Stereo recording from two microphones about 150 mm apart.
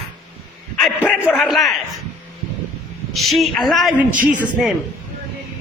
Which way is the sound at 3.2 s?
Centre (ahead or behind).